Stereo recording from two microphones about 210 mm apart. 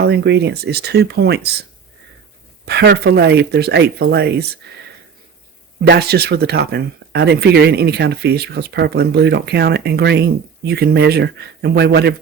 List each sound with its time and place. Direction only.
0.0 s speech: 50° right (ahead or behind)
2.6 s speech: 50° right (ahead or behind)
5.8 s speech: 50° right (ahead or behind)